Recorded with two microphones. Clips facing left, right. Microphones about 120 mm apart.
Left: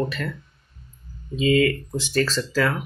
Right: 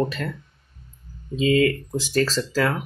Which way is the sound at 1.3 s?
30° right (ahead or behind).